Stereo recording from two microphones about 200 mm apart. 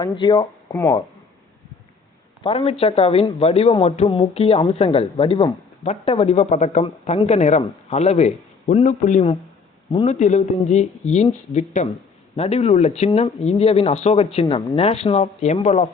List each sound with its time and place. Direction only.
0.0 s a man's voice: 20° left (ahead or behind)
2.4 s a man's voice: 30° left (ahead or behind)
10.2 s a man's voice: 35° left (ahead or behind)